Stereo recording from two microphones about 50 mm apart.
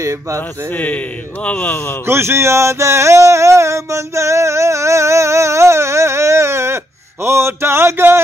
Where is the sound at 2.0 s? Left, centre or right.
Right.